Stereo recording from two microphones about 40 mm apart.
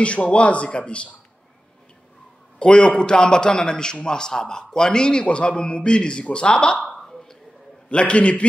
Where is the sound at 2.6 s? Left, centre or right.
Left.